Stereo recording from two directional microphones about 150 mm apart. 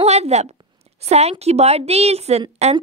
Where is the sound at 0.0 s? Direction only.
45° right (ahead or behind).